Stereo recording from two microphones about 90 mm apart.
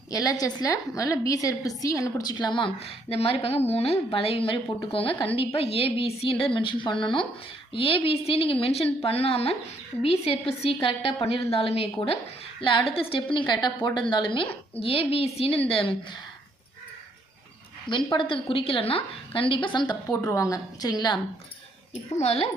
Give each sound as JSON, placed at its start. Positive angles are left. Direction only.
{"t": 0.1, "sound": "a woman's voice", "side_deg": 40}
{"t": 2.5, "sound": "a woman's voice", "side_deg": 75}
{"t": 6.4, "sound": "a woman's voice", "side_deg": 75}
{"t": 7.7, "sound": "a woman's voice", "side_deg": 90}
{"t": 12.9, "sound": "a woman's voice", "side_deg": 85}
{"t": 13.5, "sound": "a woman's voice", "side_deg": 55}
{"t": 14.8, "sound": "a woman's voice", "side_deg": 90}
{"t": 17.8, "sound": "a woman's voice", "side_deg": 65}
{"t": 20.2, "sound": "a woman's voice", "side_deg": 35}